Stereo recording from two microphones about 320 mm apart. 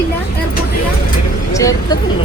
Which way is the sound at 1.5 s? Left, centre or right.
Centre.